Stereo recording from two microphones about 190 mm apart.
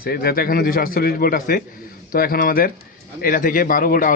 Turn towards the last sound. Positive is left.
turn(degrees=45)  # may be behind; listen again after turning